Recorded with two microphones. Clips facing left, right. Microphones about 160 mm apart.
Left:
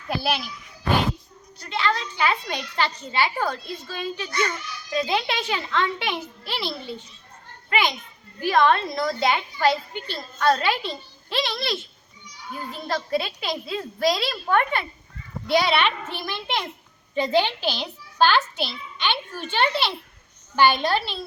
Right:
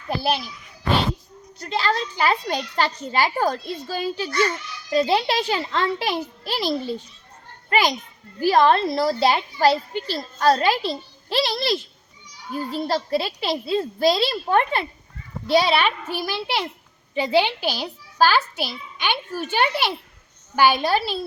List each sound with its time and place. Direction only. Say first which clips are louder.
1.7 s a woman's voice: right 2 dB; 40° right (ahead or behind)
16.0 s a child's voice: right 4 dB; 10° right (ahead or behind)